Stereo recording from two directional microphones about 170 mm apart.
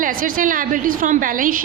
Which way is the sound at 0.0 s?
55° right (ahead or behind).